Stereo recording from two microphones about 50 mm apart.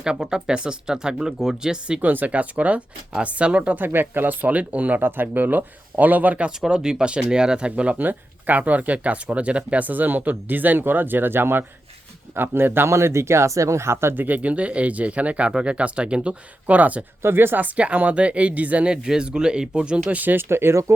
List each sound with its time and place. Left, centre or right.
0.0 s speech: centre
2.0 s speech: right
3.8 s speech: right
5.0 s speech: right
6.7 s speech: centre
7.9 s speech: right
12.9 s speech: right
14.2 s speech: right
17.2 s speech: right
17.6 s speech: right
18.9 s speech: centre
20.1 s speech: right